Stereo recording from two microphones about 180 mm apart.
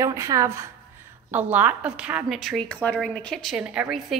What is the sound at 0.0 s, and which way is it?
A woman's voice, 15° right (ahead or behind).